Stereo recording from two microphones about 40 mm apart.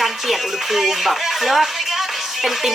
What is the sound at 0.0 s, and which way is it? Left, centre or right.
Speech, centre.